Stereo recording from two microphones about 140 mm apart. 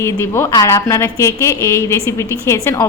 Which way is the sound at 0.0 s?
20° left (ahead or behind).